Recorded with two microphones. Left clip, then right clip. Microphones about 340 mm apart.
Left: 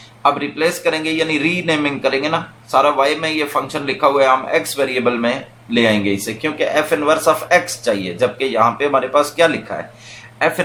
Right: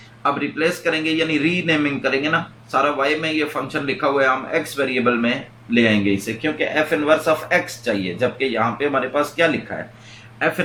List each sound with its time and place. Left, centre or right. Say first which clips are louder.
0.2 s speech: left 4 dB; centre